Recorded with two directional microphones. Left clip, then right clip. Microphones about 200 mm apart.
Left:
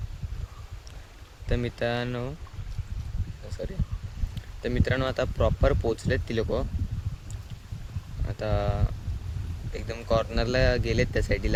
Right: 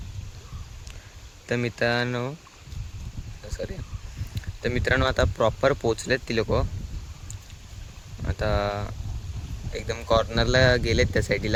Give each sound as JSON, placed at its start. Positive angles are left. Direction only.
{"t": 1.5, "sound": "speech", "side_deg": -20}
{"t": 4.4, "sound": "speech", "side_deg": -20}
{"t": 8.3, "sound": "speech", "side_deg": -25}